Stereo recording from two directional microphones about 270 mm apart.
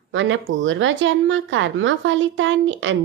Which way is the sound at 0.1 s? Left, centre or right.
Right.